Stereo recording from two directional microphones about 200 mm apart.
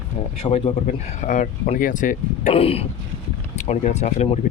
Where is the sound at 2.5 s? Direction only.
30° left (ahead or behind).